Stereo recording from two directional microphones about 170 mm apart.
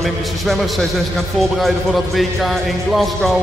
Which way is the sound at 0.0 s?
Centre (ahead or behind).